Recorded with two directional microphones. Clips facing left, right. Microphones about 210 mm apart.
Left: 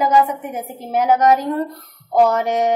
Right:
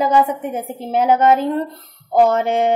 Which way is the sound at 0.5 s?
30° right (ahead or behind).